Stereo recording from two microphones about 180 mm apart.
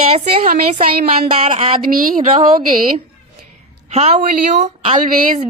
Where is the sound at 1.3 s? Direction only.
35° right (ahead or behind).